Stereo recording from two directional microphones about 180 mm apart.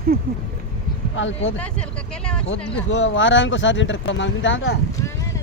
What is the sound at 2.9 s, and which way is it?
Speech, 90° left.